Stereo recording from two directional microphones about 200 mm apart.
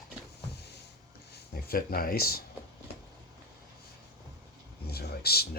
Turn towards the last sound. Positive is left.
turn(degrees=50)  # may be behind; listen again after turning